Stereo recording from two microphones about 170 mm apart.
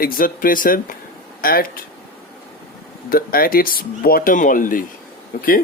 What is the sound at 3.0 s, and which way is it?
Speech, 60° left (ahead or behind).